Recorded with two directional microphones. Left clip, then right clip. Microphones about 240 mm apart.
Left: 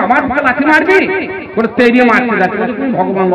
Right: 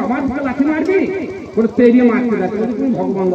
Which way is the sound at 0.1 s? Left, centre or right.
Left.